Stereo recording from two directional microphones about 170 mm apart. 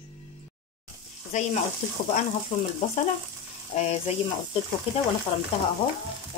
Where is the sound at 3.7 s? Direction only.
40° left (ahead or behind).